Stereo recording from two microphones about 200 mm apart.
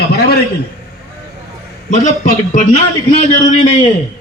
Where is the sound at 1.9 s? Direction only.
40° left (ahead or behind).